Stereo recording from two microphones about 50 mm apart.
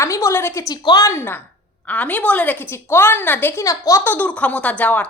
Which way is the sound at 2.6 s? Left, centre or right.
Left.